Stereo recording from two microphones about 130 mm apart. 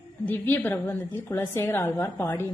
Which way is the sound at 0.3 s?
15° left (ahead or behind).